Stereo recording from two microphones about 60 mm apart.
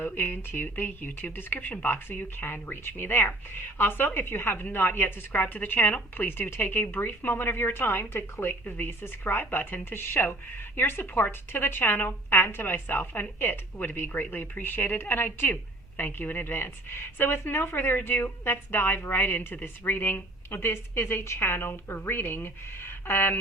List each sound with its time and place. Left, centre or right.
0.0 s a woman's voice: left